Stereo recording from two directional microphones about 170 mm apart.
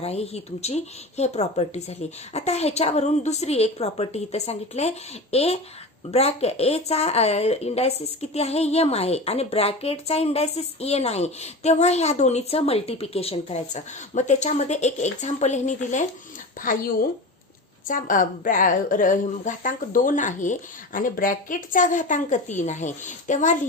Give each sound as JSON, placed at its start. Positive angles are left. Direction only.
{"t": 0.0, "sound": "a woman's voice", "side_deg": 35}
{"t": 17.8, "sound": "a woman's voice", "side_deg": 50}